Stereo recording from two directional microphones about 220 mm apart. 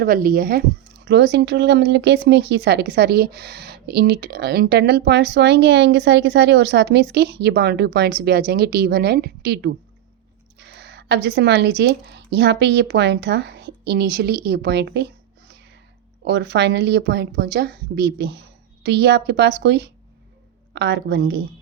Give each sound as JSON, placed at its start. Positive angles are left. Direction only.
{"t": 0.0, "sound": "a woman's voice", "side_deg": -40}